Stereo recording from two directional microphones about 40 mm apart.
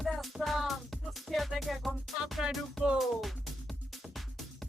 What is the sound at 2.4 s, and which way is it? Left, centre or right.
Music, centre.